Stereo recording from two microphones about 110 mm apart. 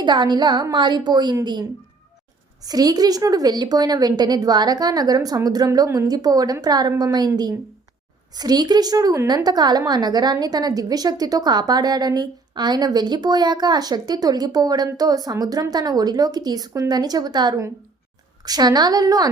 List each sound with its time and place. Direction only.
0.0 s a woman's voice: 40° right (ahead or behind)
2.6 s a woman's voice: 35° right (ahead or behind)